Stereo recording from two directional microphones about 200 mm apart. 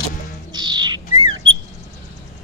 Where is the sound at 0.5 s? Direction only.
20° right (ahead or behind).